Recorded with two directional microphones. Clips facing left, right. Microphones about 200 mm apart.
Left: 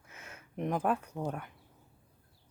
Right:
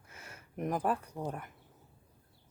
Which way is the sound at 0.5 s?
5° right (ahead or behind).